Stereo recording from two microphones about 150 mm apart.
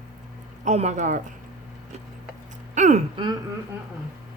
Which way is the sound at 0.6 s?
50° right (ahead or behind).